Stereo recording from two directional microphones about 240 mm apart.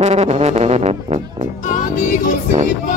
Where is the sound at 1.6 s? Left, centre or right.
Left.